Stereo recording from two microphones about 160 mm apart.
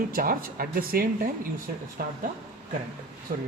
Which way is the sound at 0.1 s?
65° right (ahead or behind).